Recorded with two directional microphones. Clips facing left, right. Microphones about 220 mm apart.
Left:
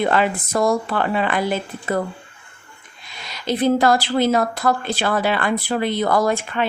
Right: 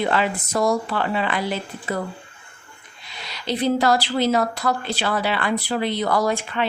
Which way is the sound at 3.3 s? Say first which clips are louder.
Left 3 dB; 45° left (ahead or behind).